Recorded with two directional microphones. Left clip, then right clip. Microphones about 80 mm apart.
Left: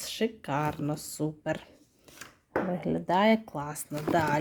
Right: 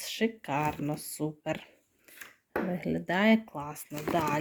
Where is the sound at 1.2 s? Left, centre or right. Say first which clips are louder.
Left 2 dB; left.